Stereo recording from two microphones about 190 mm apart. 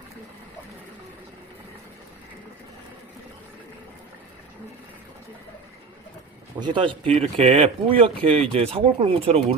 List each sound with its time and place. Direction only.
6.6 s speech: 25° right (ahead or behind)